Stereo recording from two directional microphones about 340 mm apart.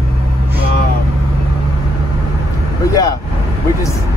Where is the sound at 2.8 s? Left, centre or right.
Centre.